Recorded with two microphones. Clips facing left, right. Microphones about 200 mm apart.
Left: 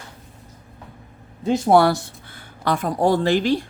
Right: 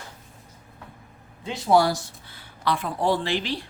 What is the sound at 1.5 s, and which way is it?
Speech, 50° left (ahead or behind).